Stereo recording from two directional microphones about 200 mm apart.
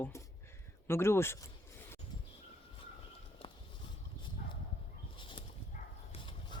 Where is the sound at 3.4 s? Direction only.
30° left (ahead or behind).